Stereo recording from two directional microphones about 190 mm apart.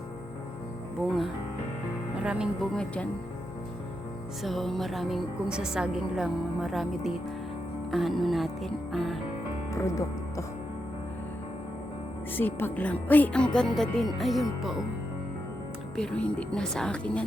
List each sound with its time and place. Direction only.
2.2 s a woman's voice: 5° right (ahead or behind)
4.4 s a woman's voice: centre (ahead or behind)
8.9 s music: centre (ahead or behind)
9.8 s speech: 15° left (ahead or behind)
12.4 s a woman's voice: 10° left (ahead or behind)
16.0 s a woman's voice: 5° left (ahead or behind)